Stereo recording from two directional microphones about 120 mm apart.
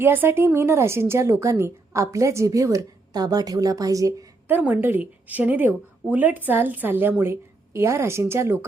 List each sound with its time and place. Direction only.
0.0 s a woman's voice: 20° right (ahead or behind)
4.4 s a woman's voice: 15° right (ahead or behind)